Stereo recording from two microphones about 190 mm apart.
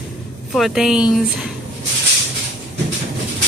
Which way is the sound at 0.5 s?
Centre (ahead or behind).